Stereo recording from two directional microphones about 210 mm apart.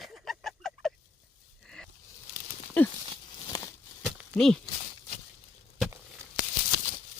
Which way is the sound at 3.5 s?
15° left (ahead or behind).